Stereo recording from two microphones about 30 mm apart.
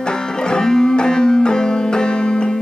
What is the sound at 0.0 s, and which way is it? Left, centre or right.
Music, left.